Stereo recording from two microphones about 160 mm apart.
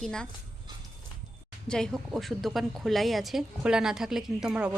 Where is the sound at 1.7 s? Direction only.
5° left (ahead or behind).